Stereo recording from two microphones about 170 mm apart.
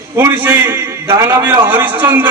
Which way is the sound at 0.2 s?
15° right (ahead or behind).